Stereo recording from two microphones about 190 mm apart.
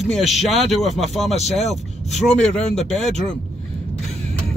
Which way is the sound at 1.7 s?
35° left (ahead or behind).